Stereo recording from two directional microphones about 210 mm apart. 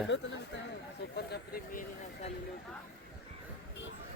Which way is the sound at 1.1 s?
50° left (ahead or behind).